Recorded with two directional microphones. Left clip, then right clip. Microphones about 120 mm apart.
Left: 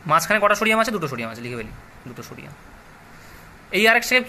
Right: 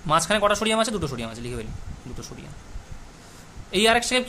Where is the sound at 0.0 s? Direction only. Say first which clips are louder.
Left 3 dB; 20° right (ahead or behind).